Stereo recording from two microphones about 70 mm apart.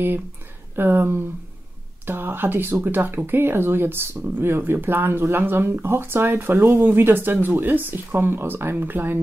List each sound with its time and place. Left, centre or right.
0.7 s speech: right